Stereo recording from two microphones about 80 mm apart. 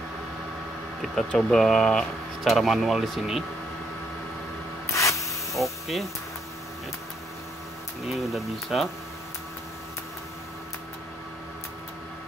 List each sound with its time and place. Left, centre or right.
1.3 s speech: centre
4.9 s spray: left
5.5 s speech: centre
8.0 s speech: centre